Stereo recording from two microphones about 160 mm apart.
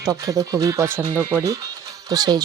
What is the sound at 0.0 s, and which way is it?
Speech, 20° right (ahead or behind).